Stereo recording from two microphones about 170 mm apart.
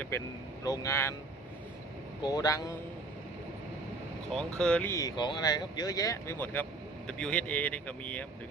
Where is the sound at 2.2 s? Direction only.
20° left (ahead or behind).